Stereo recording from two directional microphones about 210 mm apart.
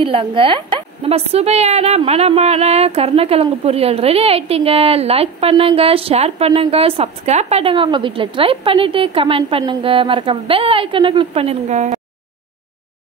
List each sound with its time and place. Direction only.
0.0 s a woman's voice: 25° right (ahead or behind)